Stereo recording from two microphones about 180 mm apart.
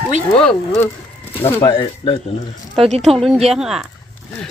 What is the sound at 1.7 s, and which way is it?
Speech, 30° left (ahead or behind).